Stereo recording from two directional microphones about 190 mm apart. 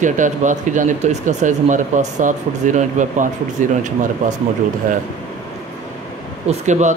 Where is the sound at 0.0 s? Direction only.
40° right (ahead or behind).